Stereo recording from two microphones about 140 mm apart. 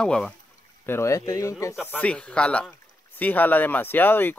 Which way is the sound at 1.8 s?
10° left (ahead or behind).